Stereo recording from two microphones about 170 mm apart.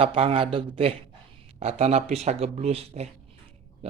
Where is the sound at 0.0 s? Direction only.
35° right (ahead or behind).